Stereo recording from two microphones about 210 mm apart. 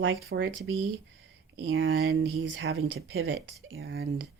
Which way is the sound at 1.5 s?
60° right (ahead or behind).